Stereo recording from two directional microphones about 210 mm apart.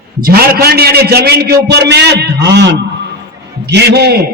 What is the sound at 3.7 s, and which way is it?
Speech, 50° right (ahead or behind).